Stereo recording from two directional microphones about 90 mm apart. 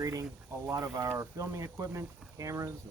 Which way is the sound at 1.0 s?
25° right (ahead or behind).